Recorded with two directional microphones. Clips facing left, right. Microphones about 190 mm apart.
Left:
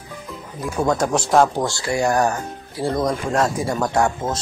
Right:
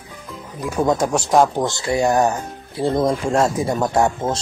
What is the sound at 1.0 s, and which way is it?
Speech, 15° right (ahead or behind).